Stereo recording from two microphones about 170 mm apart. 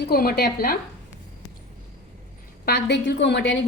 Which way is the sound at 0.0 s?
65° left (ahead or behind).